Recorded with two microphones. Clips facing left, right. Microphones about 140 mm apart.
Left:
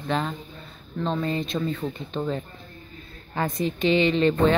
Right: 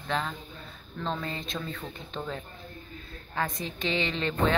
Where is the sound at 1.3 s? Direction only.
Centre (ahead or behind).